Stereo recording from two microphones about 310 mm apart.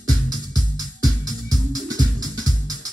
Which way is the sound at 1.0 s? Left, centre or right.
Centre.